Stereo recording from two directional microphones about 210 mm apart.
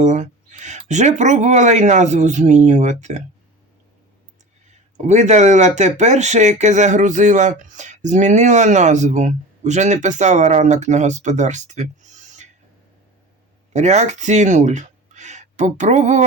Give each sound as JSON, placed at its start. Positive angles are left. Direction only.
{"t": 0.0, "sound": "speech", "side_deg": -35}
{"t": 4.9, "sound": "speech", "side_deg": -35}
{"t": 13.7, "sound": "speech", "side_deg": -35}